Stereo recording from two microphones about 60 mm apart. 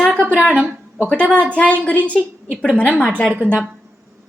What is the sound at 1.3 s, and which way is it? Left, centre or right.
A woman's voice, centre.